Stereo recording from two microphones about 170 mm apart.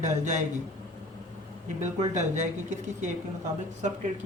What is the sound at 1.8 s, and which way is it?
A woman's voice, 45° right (ahead or behind).